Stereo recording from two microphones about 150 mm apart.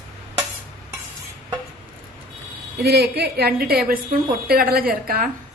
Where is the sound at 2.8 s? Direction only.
90° right.